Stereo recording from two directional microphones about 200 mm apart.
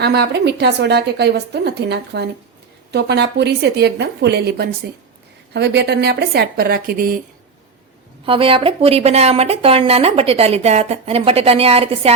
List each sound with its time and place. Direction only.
0.0 s a woman's voice: 55° right (ahead or behind)
8.2 s speech: 25° right (ahead or behind)